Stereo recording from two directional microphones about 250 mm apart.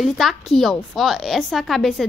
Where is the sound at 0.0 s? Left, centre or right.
Centre.